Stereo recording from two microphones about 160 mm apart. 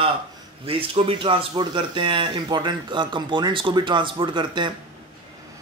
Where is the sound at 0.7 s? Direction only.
35° right (ahead or behind).